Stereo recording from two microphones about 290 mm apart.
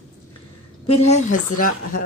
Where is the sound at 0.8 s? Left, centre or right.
Left.